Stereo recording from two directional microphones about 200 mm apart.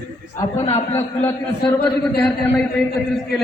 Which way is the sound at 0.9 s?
10° left (ahead or behind).